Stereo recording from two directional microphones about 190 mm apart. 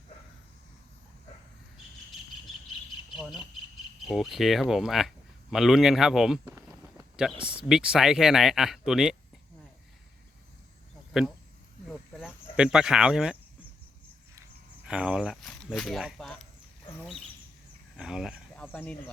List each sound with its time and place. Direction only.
3.2 s cricket: centre (ahead or behind)
4.0 s speech: centre (ahead or behind)
6.6 s a sound: 15° right (ahead or behind)
7.2 s speech: 5° right (ahead or behind)
11.1 s speech: centre (ahead or behind)
11.9 s a sound: 5° right (ahead or behind)
14.8 s speech: 5° right (ahead or behind)
17.9 s speech: 5° right (ahead or behind)
18.5 s speech: 10° left (ahead or behind)